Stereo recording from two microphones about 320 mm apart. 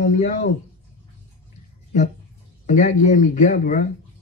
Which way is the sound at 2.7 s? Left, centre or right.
Left.